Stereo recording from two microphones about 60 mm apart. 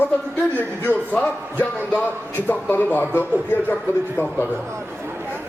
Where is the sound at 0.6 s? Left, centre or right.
Left.